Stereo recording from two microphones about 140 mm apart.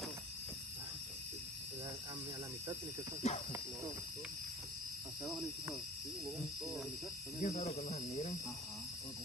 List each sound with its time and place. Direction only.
3.2 s speech: 50° left (ahead or behind)
7.4 s speech: 50° left (ahead or behind)